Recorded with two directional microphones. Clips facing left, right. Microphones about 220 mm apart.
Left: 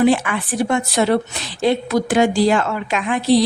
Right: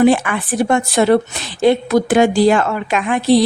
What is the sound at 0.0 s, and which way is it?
A woman's voice, 50° right (ahead or behind).